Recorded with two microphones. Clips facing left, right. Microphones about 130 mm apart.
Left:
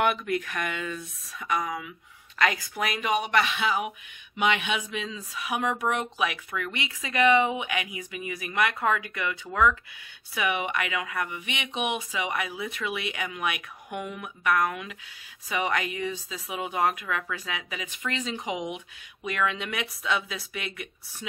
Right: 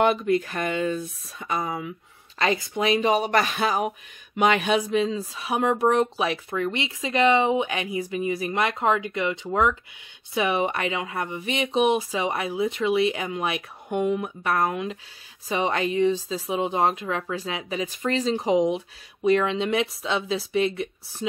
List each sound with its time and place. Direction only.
0.0 s a woman's voice: 30° right (ahead or behind)